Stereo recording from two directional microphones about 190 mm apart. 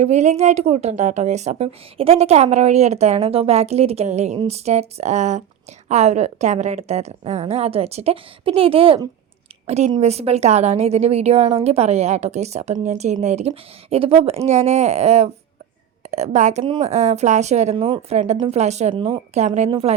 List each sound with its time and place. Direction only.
0.0 s a woman's voice: 35° right (ahead or behind)